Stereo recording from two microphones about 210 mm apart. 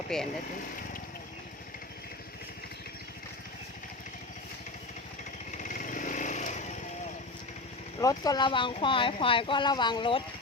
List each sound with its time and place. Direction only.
0.1 s speech: centre (ahead or behind)
5.5 s motorcycle: 40° left (ahead or behind)
8.0 s speech: 15° left (ahead or behind)